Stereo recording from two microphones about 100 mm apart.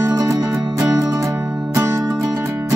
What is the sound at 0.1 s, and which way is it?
Music, 35° right (ahead or behind).